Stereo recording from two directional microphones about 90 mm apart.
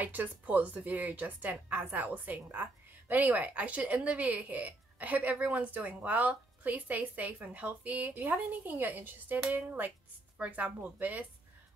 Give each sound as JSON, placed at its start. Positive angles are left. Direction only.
{"t": 0.0, "sound": "a woman's voice", "side_deg": -20}